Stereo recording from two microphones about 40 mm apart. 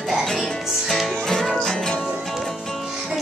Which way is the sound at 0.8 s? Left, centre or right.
Centre.